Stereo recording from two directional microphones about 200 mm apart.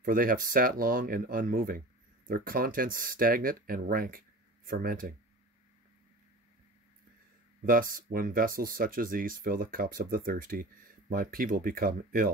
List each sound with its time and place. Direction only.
0.0 s speech: 45° right (ahead or behind)
7.6 s speech: 45° right (ahead or behind)